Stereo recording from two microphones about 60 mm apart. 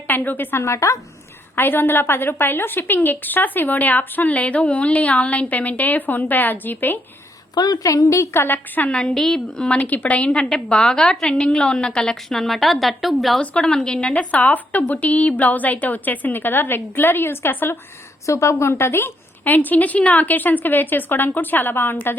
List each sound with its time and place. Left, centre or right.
0.1 s a woman's voice: left
0.6 s a woman's voice: left
1.5 s a woman's voice: left
7.5 s a woman's voice: left
8.4 s a woman's voice: left
8.9 s a woman's voice: centre
9.1 s a woman's voice: centre
9.6 s a woman's voice: left; by 13.4 s centre
13.4 s a woman's voice: centre; by 17.7 s left
18.3 s a woman's voice: left
18.7 s a woman's voice: left